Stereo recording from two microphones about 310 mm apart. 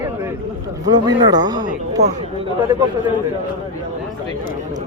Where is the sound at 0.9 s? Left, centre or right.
Centre.